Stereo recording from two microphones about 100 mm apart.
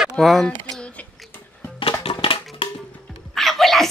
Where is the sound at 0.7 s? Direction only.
10° left (ahead or behind).